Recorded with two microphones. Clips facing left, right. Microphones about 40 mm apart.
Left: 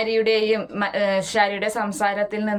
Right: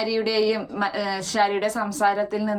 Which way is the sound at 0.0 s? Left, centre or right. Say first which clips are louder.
Left 3 dB; left.